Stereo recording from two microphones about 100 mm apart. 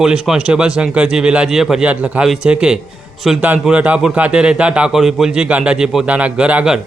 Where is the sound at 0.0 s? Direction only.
5° right (ahead or behind).